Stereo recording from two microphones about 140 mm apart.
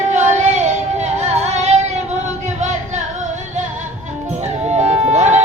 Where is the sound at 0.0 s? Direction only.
55° right (ahead or behind).